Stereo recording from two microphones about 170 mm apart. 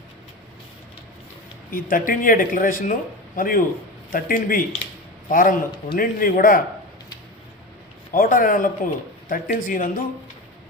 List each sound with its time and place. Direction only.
1.7 s speech: 55° left (ahead or behind)
8.1 s speech: 55° left (ahead or behind)